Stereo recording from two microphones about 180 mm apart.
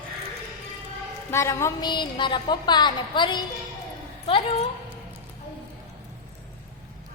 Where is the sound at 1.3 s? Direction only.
15° left (ahead or behind).